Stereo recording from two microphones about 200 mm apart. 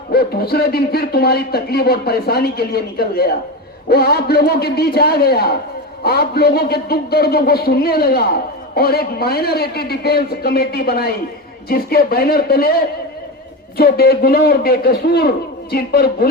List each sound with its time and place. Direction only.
0.1 s speech: 50° left (ahead or behind)
13.7 s speech: 50° left (ahead or behind)